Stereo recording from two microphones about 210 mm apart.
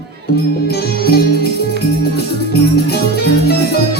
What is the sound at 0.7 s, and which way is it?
Music, 50° left (ahead or behind).